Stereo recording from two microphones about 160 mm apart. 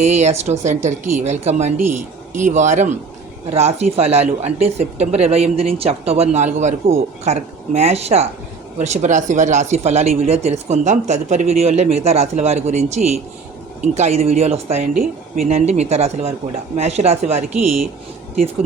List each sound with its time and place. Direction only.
0.0 s speech: 45° right (ahead or behind)